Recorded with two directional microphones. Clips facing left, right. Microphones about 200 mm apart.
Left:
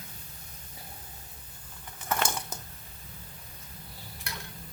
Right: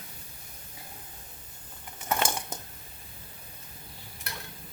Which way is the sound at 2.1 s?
25° right (ahead or behind).